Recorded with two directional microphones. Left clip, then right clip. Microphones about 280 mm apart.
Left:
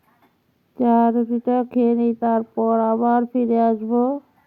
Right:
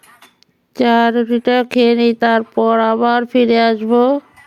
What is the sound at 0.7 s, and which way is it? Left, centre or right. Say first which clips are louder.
Speech: right 5 dB; right.